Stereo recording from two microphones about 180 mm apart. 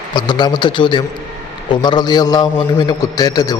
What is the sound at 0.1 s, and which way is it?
A man's voice, 25° left (ahead or behind).